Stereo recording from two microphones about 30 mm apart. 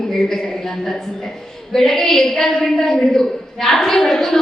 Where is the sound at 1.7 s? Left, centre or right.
Centre.